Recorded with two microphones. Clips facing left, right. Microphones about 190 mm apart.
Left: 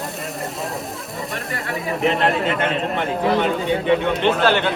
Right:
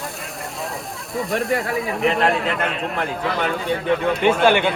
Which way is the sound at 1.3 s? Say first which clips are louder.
Right 8 dB; centre (ahead or behind).